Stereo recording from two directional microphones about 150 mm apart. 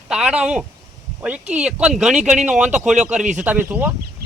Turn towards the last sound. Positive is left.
turn(degrees=-10)  # may be behind; listen again after turning